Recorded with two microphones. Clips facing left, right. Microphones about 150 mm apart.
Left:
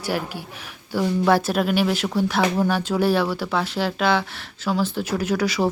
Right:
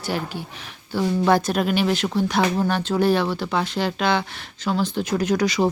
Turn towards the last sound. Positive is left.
turn(degrees=5)  # may be behind; listen again after turning